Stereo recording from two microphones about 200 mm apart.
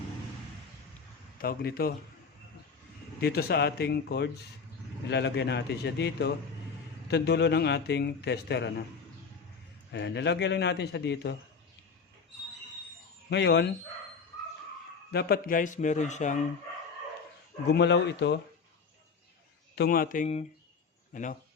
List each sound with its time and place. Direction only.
1.4 s speech: 50° left (ahead or behind)
3.2 s a man's voice: 50° left (ahead or behind)
9.9 s a man's voice: 60° left (ahead or behind)
13.3 s a man's voice: 55° left (ahead or behind)
15.1 s speech: 50° left (ahead or behind)
17.7 s a man's voice: 60° left (ahead or behind)
19.7 s a man's voice: 50° left (ahead or behind)